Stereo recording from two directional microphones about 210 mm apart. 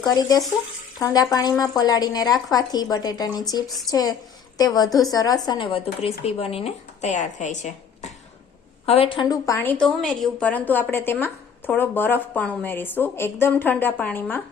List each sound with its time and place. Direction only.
0.0 s speech: 20° left (ahead or behind)